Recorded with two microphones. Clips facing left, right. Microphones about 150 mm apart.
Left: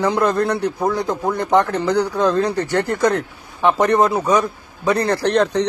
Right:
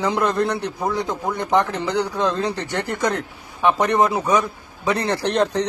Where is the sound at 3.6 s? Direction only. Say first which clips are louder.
Left 2 dB; 15° right (ahead or behind).